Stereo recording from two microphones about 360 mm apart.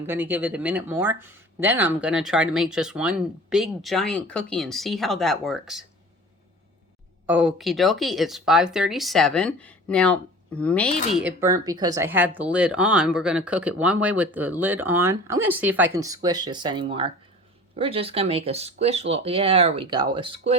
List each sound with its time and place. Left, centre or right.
0.0 s speech: centre
7.3 s speech: centre